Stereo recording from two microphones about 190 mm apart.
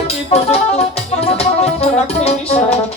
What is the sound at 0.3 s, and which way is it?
Music, 35° left (ahead or behind).